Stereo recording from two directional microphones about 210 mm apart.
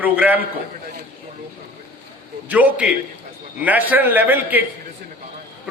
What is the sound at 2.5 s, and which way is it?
A man's voice, 5° right (ahead or behind).